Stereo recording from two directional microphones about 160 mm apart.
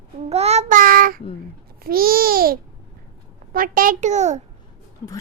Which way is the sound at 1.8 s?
65° right (ahead or behind).